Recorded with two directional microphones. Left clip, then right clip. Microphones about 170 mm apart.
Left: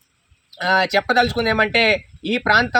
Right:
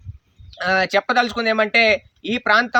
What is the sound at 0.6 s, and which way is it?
A man's voice, 10° right (ahead or behind).